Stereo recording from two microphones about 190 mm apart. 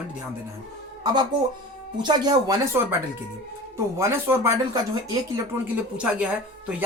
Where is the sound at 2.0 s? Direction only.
20° right (ahead or behind).